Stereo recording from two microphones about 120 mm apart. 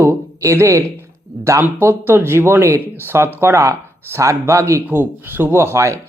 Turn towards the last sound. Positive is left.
turn(degrees=-25)  # may be behind; listen again after turning